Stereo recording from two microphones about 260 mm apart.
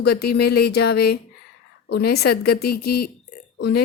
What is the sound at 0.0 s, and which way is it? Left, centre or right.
Speech, left.